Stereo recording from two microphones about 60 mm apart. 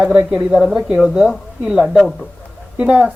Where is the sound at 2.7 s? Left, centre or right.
Centre.